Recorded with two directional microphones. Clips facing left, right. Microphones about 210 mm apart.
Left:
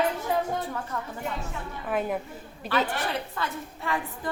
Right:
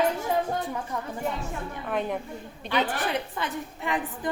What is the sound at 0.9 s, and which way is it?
Speech, 15° right (ahead or behind).